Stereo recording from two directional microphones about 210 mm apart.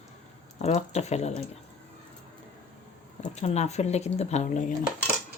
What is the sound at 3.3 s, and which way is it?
Speech, 30° left (ahead or behind).